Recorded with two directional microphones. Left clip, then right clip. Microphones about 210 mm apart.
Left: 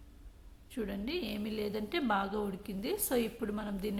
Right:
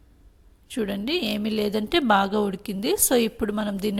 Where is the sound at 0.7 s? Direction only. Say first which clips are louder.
Right 11 dB; 40° right (ahead or behind).